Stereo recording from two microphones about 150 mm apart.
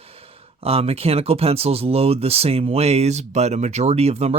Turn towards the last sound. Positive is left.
turn(degrees=-45)  # may be behind; listen again after turning